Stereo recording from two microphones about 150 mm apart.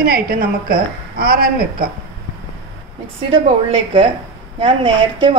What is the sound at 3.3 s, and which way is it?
Speech, 35° right (ahead or behind).